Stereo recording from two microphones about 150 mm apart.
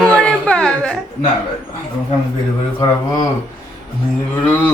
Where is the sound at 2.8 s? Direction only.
25° left (ahead or behind).